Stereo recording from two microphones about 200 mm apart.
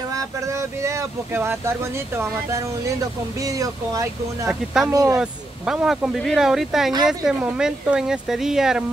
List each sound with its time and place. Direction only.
0.1 s speech: 15° right (ahead or behind)
4.5 s speech: 5° right (ahead or behind)
4.9 s speech: 15° right (ahead or behind)
5.2 s speech: 5° right (ahead or behind)